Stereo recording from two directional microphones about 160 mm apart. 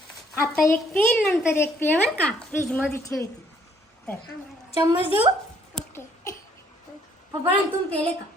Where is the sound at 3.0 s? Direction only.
20° left (ahead or behind).